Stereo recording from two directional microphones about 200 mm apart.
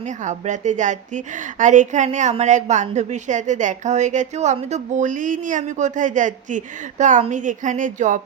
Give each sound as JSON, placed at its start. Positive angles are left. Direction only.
{"t": 0.3, "sound": "a woman's voice", "side_deg": -35}